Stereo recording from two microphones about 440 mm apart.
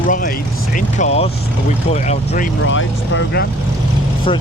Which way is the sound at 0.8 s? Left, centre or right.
Centre.